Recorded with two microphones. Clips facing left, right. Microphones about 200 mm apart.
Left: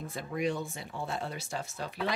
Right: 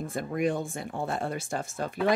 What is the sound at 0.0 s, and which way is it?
Speech, 50° right (ahead or behind).